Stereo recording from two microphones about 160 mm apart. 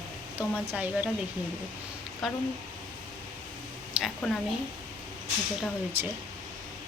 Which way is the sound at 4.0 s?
5° right (ahead or behind).